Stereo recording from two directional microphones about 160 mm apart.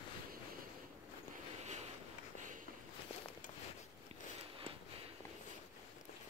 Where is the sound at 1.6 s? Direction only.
45° right (ahead or behind).